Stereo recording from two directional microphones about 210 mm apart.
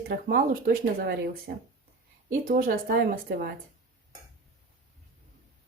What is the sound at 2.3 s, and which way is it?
Speech, 40° right (ahead or behind).